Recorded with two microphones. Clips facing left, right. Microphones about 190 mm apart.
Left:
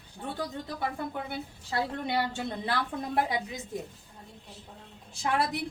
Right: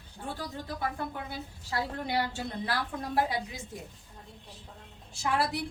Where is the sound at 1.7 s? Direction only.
25° left (ahead or behind).